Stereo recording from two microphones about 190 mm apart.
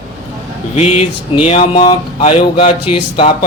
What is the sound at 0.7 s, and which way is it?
Speech, 35° left (ahead or behind).